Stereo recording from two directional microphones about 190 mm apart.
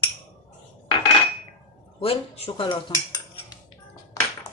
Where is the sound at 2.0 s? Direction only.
30° left (ahead or behind).